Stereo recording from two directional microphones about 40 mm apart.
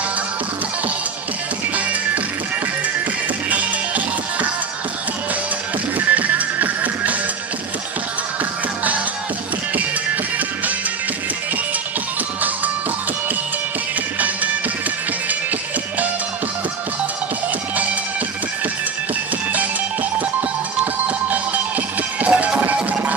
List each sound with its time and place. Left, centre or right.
3.4 s music: right
5.9 s music: right
19.5 s music: right